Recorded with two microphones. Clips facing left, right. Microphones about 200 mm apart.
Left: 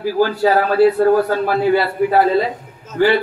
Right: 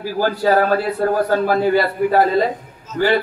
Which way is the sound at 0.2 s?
45° right (ahead or behind).